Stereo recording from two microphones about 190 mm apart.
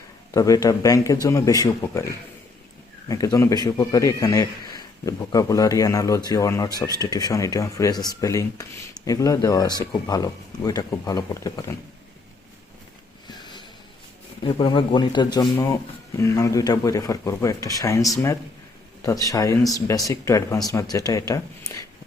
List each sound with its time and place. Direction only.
0.3 s a man's voice: 20° left (ahead or behind)
13.2 s a sound: 25° left (ahead or behind)
14.4 s a man's voice: 25° left (ahead or behind)